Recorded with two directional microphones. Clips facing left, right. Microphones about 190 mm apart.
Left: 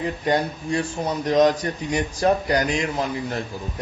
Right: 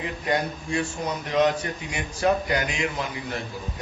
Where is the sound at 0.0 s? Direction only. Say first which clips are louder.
Left 4 dB; 35° left (ahead or behind).